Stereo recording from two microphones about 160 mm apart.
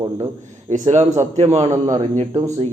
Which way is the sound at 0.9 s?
50° right (ahead or behind).